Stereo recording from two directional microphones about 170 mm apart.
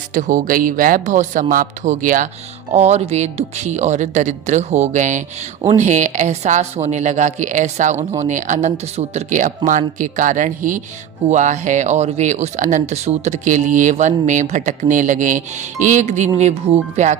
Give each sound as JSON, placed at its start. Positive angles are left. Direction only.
{"t": 0.1, "sound": "speech", "side_deg": -50}